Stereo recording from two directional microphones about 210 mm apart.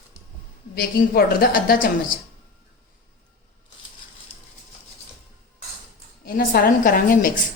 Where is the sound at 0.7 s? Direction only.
45° left (ahead or behind).